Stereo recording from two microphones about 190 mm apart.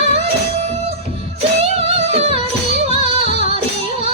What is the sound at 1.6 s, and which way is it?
Music, 30° right (ahead or behind).